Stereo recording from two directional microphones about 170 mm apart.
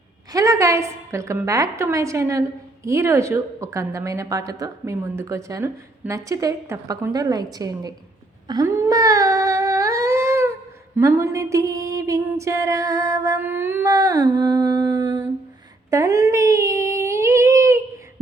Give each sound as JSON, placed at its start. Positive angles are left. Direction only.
{"t": 0.3, "sound": "a woman's voice", "side_deg": -20}
{"t": 8.4, "sound": "humming", "side_deg": -20}
{"t": 10.9, "sound": "a sound", "side_deg": -15}